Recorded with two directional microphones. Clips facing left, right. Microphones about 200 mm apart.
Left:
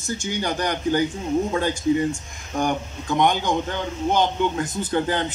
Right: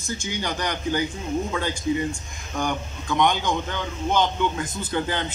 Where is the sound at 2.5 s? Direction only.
45° left (ahead or behind).